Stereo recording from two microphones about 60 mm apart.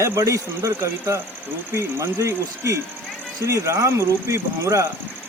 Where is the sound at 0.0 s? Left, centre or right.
Right.